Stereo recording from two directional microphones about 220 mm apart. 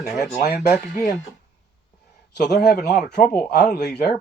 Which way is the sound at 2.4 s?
50° left (ahead or behind).